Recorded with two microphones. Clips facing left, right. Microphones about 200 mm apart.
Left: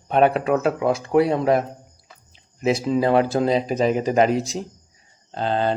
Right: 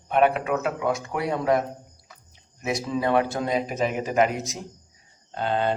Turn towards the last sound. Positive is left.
turn(degrees=30)  # may be behind; listen again after turning